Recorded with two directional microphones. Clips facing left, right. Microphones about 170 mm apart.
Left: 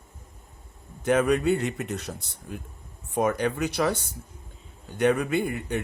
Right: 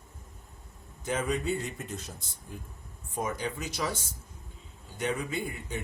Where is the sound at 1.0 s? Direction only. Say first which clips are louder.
Left 9 dB; 65° left (ahead or behind).